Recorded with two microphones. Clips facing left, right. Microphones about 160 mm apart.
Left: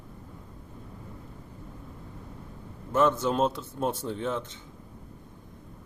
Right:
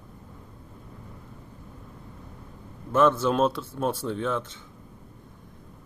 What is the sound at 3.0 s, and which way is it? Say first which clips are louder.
Speech: right 3 dB; 60° right (ahead or behind).